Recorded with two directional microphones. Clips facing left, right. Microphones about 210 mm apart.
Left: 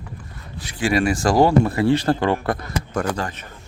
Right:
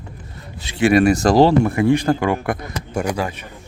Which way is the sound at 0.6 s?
25° right (ahead or behind).